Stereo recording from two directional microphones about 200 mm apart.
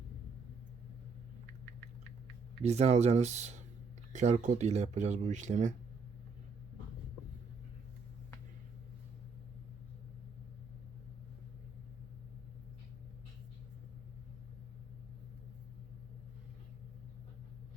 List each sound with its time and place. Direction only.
2.6 s speech: 30° right (ahead or behind)